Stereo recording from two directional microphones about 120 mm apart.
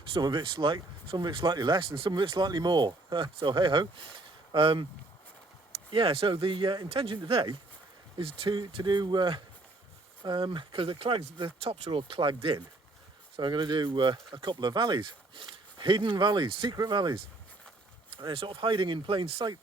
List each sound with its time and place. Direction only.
0.1 s speech: 40° right (ahead or behind)
5.9 s speech: 50° right (ahead or behind)
18.2 s speech: 45° right (ahead or behind)